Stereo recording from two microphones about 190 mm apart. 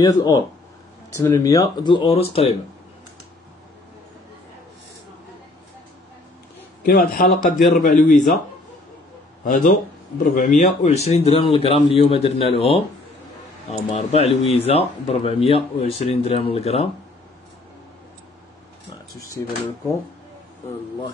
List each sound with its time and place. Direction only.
0.0 s speech: 20° left (ahead or behind)
6.8 s a man's voice: 50° left (ahead or behind)
9.4 s speech: 45° left (ahead or behind)